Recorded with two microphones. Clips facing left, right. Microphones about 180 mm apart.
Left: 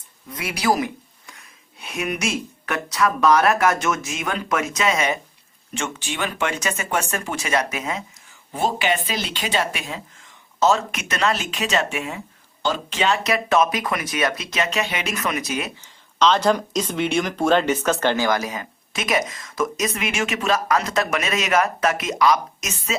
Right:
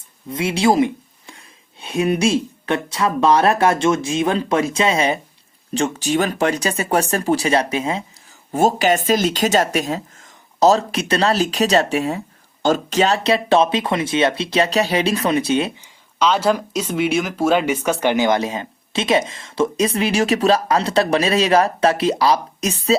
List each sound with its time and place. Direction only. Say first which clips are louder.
0.3 s speech: right 5 dB; 25° right (ahead or behind)
8.5 s speech: right 6 dB; 45° right (ahead or behind)
15.7 s speech: right 1 dB; 10° right (ahead or behind); by 23.0 s 35° right (ahead or behind)